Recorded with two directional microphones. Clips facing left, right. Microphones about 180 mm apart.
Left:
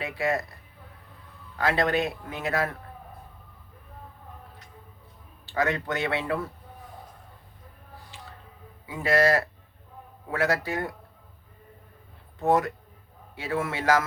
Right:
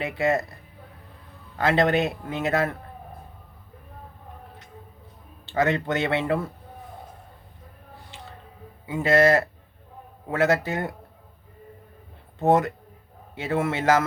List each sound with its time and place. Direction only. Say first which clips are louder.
0.0 s speech: right 4 dB; 25° right (ahead or behind)
1.5 s speech: right 4 dB; 25° right (ahead or behind)
5.5 s speech: right 4 dB; 25° right (ahead or behind)
8.1 s a sound: right 3 dB; 25° right (ahead or behind)
8.9 s speech: right 4 dB; 25° right (ahead or behind)
12.4 s speech: right 3 dB; 25° right (ahead or behind)